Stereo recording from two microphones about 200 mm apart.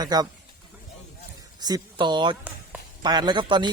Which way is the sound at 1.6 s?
20° right (ahead or behind).